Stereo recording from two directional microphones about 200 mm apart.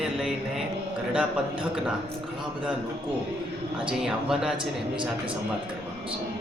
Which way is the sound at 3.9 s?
Centre (ahead or behind).